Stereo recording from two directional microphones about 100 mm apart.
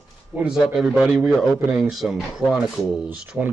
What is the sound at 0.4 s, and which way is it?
Speech, 5° right (ahead or behind).